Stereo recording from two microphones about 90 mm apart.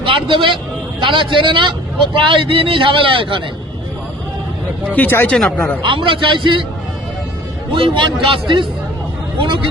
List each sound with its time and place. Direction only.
0.0 s a man's voice: 70° right (ahead or behind)
4.9 s speech: 20° left (ahead or behind)
5.4 s speech: 10° left (ahead or behind)
5.8 s speech: 70° right (ahead or behind)
7.8 s speech: 70° right (ahead or behind)